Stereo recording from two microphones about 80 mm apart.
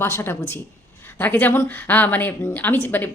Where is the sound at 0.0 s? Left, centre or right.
Left.